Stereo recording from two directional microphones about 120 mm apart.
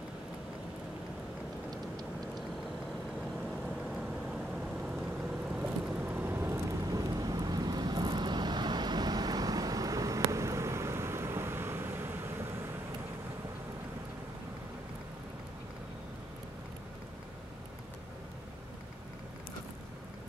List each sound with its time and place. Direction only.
3.4 s vehicle: centre (ahead or behind)
5.5 s vehicle: 15° right (ahead or behind)